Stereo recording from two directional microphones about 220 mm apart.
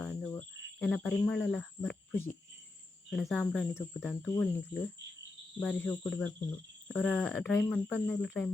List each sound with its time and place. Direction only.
0.0 s cricket: 5° left (ahead or behind)
3.1 s speech: 5° left (ahead or behind)